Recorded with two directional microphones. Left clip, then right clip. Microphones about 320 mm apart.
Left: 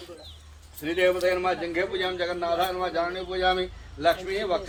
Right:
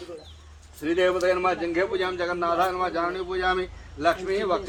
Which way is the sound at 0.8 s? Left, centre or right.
Centre.